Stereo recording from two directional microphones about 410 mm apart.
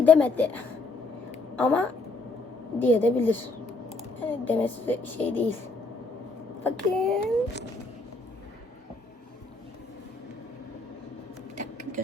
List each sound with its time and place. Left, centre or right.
0.0 s speech: centre
6.7 s speech: centre
11.5 s a sound: right